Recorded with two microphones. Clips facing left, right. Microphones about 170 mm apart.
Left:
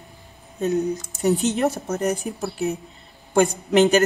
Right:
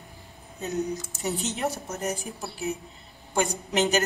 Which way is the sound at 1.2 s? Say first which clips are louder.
Left 10 dB; 65° left (ahead or behind).